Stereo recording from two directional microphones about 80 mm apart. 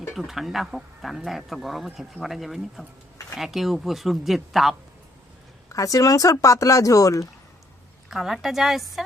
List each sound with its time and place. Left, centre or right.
0.1 s speech: centre
5.6 s speech: left
8.1 s speech: centre